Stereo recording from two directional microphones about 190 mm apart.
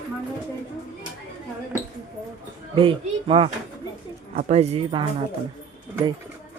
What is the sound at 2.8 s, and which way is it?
Speech, 30° right (ahead or behind).